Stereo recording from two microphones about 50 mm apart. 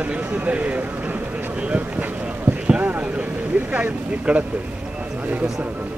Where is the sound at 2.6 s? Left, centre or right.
Right.